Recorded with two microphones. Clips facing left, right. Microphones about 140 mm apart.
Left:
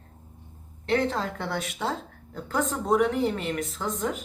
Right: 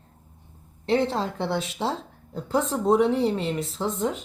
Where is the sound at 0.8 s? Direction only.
30° right (ahead or behind).